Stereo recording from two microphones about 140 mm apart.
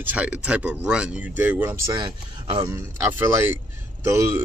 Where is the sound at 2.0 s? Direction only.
35° right (ahead or behind).